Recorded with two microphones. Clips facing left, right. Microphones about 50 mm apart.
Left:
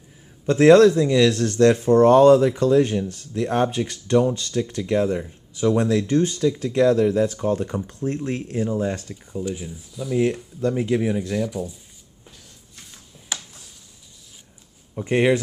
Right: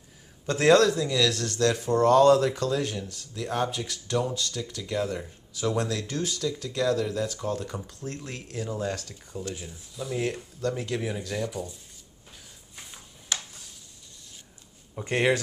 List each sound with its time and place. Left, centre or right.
0.5 s speech: centre
2.3 s speech: centre; by 5.0 s left
5.8 s speech: left; by 10.2 s centre
10.6 s speech: centre
11.3 s speech: centre
13.3 s a sound: centre
15.0 s speech: centre